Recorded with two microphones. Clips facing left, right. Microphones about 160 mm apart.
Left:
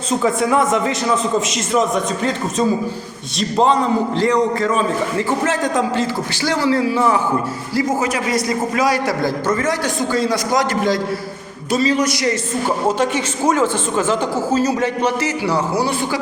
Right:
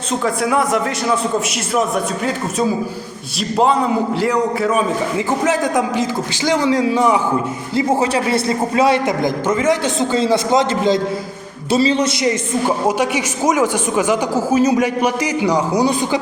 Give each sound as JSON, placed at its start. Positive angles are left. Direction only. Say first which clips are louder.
{"t": 0.2, "sound": "a man's voice", "louder": "left 1 dB", "side_deg": 0}
{"t": 7.8, "sound": "a man's voice", "louder": "right 3 dB", "side_deg": -30}